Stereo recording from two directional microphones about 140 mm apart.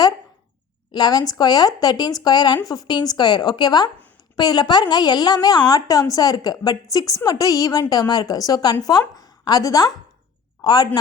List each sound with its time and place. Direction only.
0.9 s a woman's voice: 30° left (ahead or behind)